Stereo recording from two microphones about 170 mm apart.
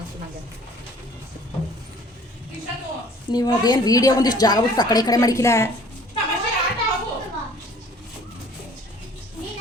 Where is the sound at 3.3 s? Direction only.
25° left (ahead or behind).